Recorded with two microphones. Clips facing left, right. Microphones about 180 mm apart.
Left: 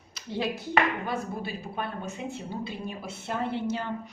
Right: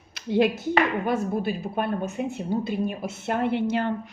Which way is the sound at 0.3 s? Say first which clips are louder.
Right 9 dB; 60° right (ahead or behind).